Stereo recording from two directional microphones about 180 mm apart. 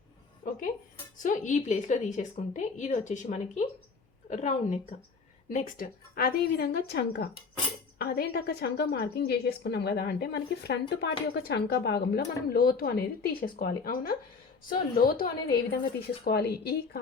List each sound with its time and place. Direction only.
1.2 s a woman's voice: 45° left (ahead or behind)
16.0 s a woman's voice: 65° left (ahead or behind)